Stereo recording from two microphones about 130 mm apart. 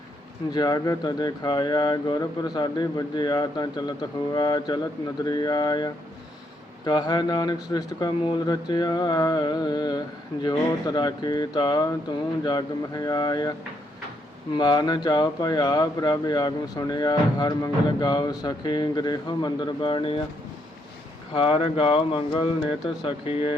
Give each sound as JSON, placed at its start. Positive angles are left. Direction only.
{"t": 0.5, "sound": "speech", "side_deg": 30}
{"t": 14.5, "sound": "speech", "side_deg": 35}
{"t": 21.3, "sound": "speech", "side_deg": 45}